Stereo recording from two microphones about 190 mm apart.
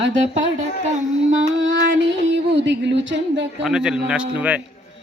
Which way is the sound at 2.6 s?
70° right (ahead or behind).